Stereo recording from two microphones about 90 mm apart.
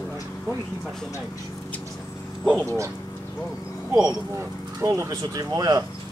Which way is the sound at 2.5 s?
35° right (ahead or behind).